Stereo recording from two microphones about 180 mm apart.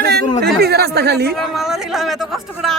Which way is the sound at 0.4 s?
65° right (ahead or behind).